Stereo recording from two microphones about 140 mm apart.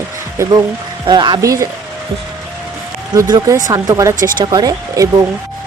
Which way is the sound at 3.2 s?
25° right (ahead or behind).